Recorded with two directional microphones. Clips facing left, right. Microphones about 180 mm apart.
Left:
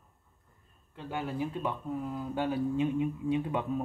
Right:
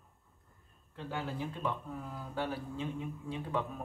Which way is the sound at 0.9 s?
15° left (ahead or behind).